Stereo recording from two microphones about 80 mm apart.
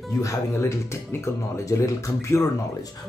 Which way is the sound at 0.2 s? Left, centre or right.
Left.